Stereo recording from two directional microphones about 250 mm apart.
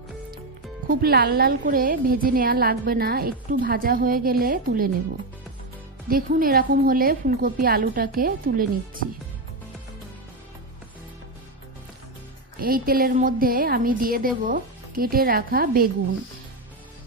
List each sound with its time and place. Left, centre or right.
0.8 s a woman's voice: right
6.0 s a woman's voice: right
12.5 s a woman's voice: right